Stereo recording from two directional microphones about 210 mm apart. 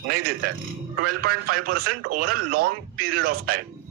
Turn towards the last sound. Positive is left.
turn(degrees=-45)  # may be behind; listen again after turning